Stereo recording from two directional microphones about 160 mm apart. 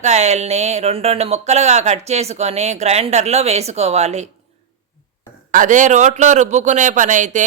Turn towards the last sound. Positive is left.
turn(degrees=-50)  # may be behind; listen again after turning